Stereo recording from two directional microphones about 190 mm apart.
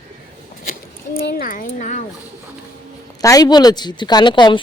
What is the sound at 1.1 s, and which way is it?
Speech, 50° left (ahead or behind).